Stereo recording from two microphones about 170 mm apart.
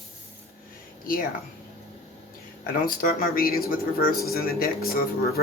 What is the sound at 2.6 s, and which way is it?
Speech, 60° left (ahead or behind).